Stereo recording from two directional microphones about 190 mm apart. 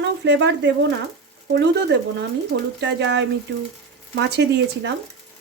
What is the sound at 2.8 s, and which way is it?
Speech, 70° right (ahead or behind).